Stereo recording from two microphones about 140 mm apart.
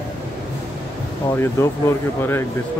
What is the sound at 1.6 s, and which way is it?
Speech, 15° left (ahead or behind).